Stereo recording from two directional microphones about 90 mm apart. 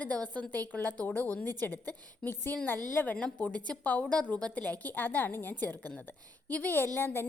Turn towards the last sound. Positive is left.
turn(degrees=25)  # may be behind; listen again after turning